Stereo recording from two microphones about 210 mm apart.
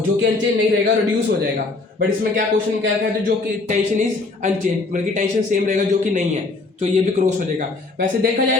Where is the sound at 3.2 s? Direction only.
35° right (ahead or behind).